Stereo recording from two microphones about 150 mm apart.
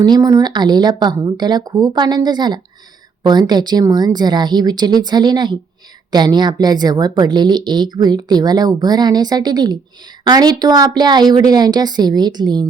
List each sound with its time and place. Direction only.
0.0 s a woman's voice: 25° right (ahead or behind)